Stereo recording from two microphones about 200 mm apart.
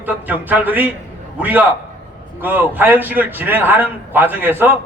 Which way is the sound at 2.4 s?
10° right (ahead or behind).